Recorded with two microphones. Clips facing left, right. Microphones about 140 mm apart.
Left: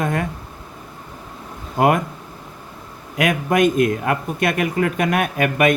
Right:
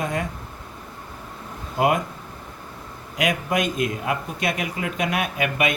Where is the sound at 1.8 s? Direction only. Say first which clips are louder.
Left 4 dB; 55° left (ahead or behind).